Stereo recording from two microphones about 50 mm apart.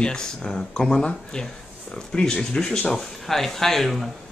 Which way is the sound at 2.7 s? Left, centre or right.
Centre.